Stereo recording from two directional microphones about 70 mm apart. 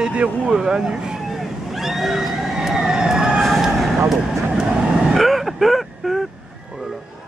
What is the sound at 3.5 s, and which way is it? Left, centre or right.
Vehicle, centre.